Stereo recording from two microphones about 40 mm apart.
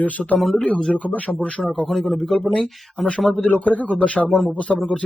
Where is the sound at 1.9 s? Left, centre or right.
Centre.